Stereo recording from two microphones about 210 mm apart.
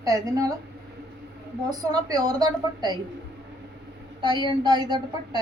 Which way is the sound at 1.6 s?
20° right (ahead or behind).